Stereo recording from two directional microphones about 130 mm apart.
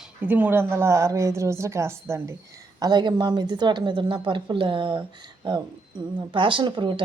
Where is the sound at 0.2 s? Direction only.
15° right (ahead or behind).